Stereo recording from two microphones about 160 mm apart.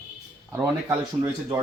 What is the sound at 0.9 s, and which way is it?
Speech, 15° right (ahead or behind).